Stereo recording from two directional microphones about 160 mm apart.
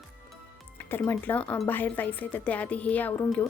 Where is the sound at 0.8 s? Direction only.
10° left (ahead or behind).